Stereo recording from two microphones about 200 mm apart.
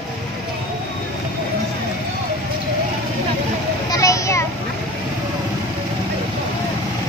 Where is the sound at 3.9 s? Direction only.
15° left (ahead or behind).